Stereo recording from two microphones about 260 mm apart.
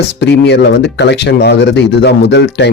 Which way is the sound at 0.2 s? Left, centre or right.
Left.